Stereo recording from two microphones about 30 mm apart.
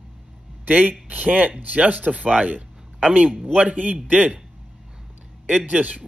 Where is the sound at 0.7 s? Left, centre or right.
Right.